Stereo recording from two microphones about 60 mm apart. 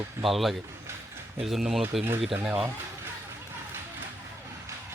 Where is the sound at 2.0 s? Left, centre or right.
Right.